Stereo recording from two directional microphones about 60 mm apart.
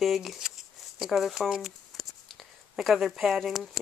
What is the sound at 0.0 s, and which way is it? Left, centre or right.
Speech, centre.